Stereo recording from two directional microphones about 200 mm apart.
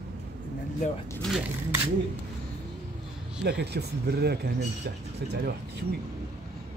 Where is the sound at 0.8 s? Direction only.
35° left (ahead or behind).